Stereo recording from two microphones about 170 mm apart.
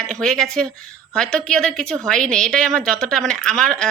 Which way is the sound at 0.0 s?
5° left (ahead or behind).